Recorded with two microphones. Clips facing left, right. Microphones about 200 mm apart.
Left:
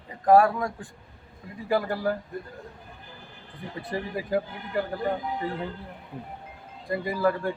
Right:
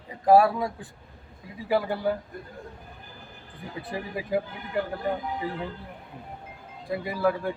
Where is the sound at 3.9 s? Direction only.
Centre (ahead or behind).